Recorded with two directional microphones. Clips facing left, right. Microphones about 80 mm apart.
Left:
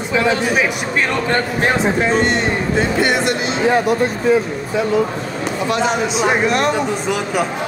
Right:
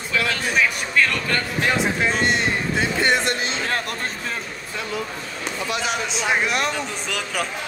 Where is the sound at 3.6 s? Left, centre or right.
Centre.